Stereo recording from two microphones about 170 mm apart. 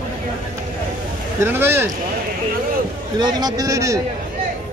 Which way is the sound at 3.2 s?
20° right (ahead or behind).